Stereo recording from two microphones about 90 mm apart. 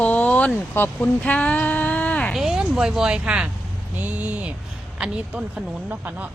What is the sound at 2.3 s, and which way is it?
Speech, 5° right (ahead or behind).